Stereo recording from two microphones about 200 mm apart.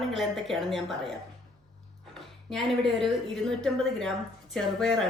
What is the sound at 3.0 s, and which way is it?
A woman's voice, centre (ahead or behind).